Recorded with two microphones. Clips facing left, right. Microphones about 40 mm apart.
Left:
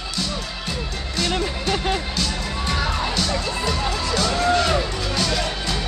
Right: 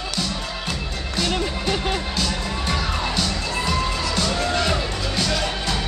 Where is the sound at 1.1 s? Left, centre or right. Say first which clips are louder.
Even; centre.